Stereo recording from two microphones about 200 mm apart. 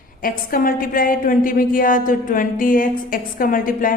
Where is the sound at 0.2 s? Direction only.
45° left (ahead or behind).